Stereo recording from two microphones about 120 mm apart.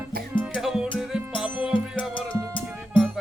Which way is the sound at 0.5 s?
5° right (ahead or behind).